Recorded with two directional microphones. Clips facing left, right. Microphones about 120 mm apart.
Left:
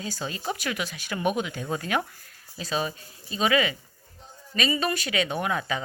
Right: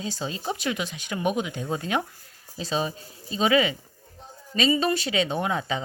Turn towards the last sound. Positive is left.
turn(degrees=-25)  # may be behind; listen again after turning